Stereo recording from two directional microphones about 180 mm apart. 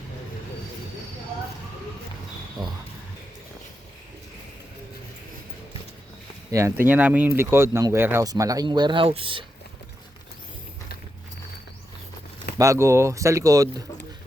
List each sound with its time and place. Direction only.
2.6 s a sound: 25° right (ahead or behind)
6.5 s speech: 15° right (ahead or behind)
12.5 s speech: 15° right (ahead or behind)